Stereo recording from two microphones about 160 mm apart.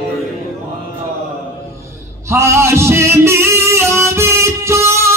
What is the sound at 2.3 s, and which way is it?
Music, 15° right (ahead or behind).